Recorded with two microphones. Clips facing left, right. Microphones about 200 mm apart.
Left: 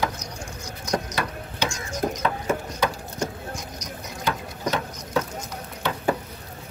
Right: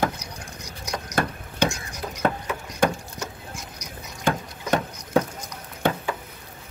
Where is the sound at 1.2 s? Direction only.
50° right (ahead or behind).